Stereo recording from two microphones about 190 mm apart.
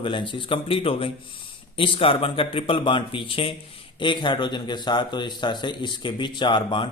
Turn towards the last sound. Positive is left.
turn(degrees=25)  # may be behind; listen again after turning